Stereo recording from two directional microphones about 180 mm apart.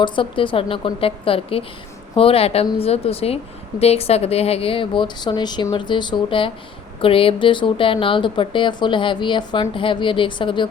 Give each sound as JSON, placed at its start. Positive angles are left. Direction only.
{"t": 0.0, "sound": "a woman's voice", "side_deg": 30}